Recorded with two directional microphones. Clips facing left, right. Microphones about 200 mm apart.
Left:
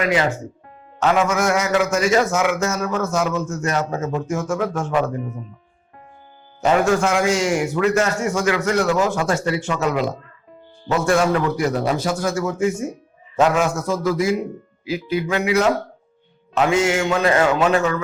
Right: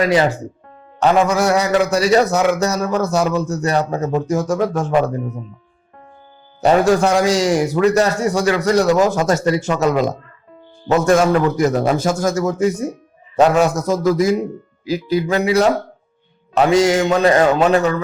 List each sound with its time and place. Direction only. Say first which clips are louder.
0.0 s a man's voice: right 4 dB; 35° right (ahead or behind)
6.6 s a man's voice: right 4 dB; 35° right (ahead or behind)